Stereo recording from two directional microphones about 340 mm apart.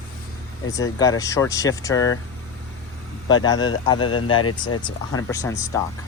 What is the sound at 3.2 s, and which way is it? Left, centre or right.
A man's voice, centre.